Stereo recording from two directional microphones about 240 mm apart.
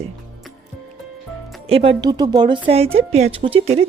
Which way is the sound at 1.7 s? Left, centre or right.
Right.